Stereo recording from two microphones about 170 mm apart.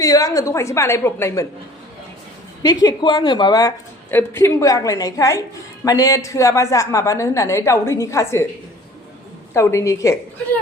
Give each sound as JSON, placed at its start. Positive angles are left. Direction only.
{"t": 0.0, "sound": "a woman's voice", "side_deg": 20}
{"t": 2.6, "sound": "a woman's voice", "side_deg": 25}
{"t": 9.5, "sound": "a woman's voice", "side_deg": 15}